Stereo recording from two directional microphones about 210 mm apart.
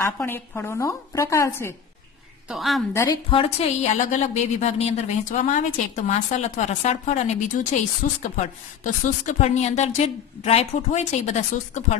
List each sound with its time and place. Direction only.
0.0 s a woman's voice: 10° left (ahead or behind)
2.4 s a woman's voice: centre (ahead or behind)
2.9 s a woman's voice: 15° left (ahead or behind)
3.3 s a woman's voice: 30° left (ahead or behind)